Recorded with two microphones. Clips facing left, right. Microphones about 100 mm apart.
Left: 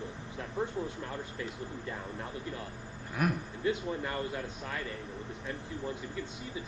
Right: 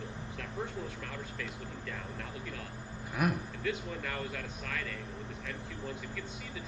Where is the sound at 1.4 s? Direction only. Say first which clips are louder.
Left 3 dB; 25° left (ahead or behind).